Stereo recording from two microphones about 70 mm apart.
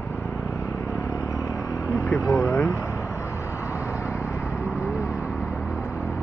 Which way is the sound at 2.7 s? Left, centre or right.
Left.